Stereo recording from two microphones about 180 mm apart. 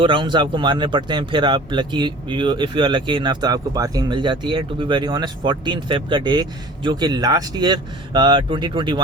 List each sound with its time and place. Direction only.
0.0 s speech: 25° right (ahead or behind)